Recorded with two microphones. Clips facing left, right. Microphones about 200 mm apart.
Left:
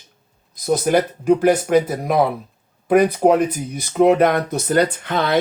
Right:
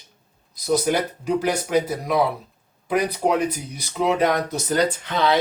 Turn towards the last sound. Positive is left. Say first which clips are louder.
# left 2 dB
turn(degrees=55)  # may be behind; listen again after turning